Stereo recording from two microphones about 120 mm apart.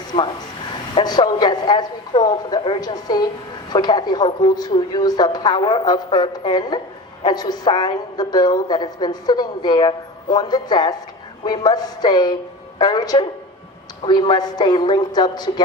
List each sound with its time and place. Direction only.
0.9 s a woman's voice: 40° left (ahead or behind)